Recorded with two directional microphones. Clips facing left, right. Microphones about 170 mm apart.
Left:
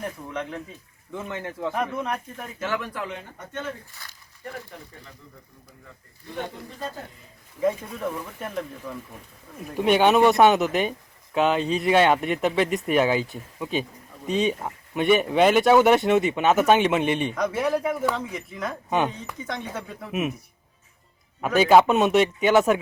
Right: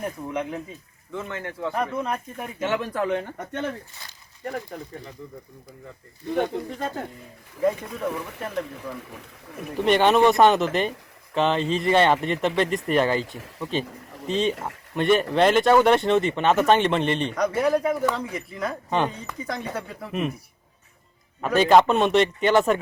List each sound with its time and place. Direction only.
0.0 s speech: 10° right (ahead or behind)
1.1 s speech: 20° left (ahead or behind)
1.7 s speech: centre (ahead or behind)
2.6 s speech: 25° right (ahead or behind)
2.9 s speech: 50° right (ahead or behind)
4.7 s speech: 50° right (ahead or behind)
6.3 s speech: 65° right (ahead or behind)
7.9 s speech: centre (ahead or behind)
9.7 s speech: 5° left (ahead or behind)
21.4 s speech: 5° left (ahead or behind)